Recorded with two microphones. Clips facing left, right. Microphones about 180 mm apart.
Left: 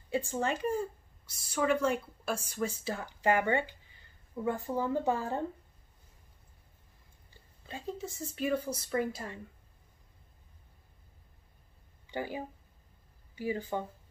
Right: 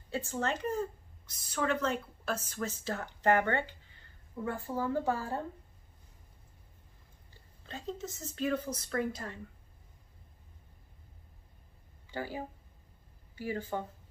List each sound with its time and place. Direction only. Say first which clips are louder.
0.1 s a woman's voice: left 2 dB; 15° left (ahead or behind)
7.6 s a woman's voice: left 1 dB; 10° left (ahead or behind)
12.1 s speech: left 2 dB; 15° left (ahead or behind)
13.4 s a woman's voice: left 2 dB; 15° left (ahead or behind)